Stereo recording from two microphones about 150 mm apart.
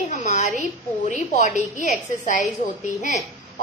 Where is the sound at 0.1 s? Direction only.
50° left (ahead or behind).